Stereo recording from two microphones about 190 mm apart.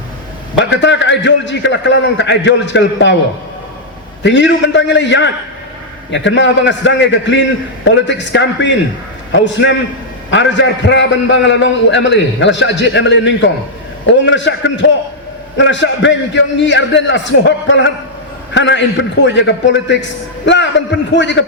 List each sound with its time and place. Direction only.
0.5 s a man's voice: 75° left (ahead or behind)
4.2 s a man's voice: 70° left (ahead or behind)